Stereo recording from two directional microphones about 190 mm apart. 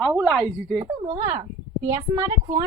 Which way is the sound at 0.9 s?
25° right (ahead or behind).